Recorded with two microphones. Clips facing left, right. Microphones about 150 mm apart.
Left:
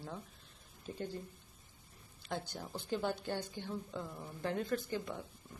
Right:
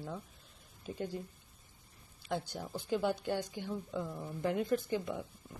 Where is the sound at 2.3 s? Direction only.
10° right (ahead or behind).